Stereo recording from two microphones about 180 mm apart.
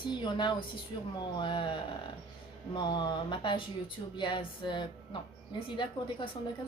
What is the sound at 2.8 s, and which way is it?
Speech, 25° left (ahead or behind).